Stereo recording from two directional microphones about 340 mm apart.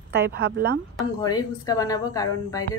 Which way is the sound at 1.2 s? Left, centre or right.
Centre.